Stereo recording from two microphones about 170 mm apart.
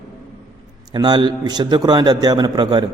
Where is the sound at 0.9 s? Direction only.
25° right (ahead or behind).